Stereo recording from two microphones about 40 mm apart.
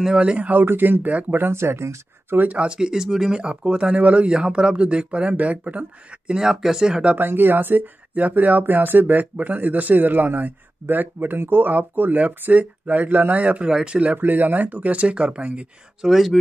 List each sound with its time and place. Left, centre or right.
0.0 s speech: right
0.5 s speech: right
1.3 s speech: right
2.5 s speech: right
6.3 s speech: centre
7.2 s speech: right
11.3 s speech: right
11.6 s speech: right
13.4 s speech: right
14.1 s speech: right
16.0 s speech: centre